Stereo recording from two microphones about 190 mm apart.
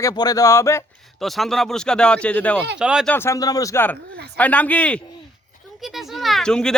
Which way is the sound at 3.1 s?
15° left (ahead or behind).